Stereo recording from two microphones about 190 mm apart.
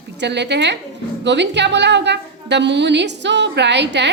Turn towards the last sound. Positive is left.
turn(degrees=-65)  # may be behind; listen again after turning